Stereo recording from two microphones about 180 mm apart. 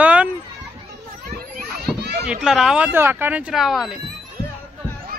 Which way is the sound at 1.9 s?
65° right (ahead or behind).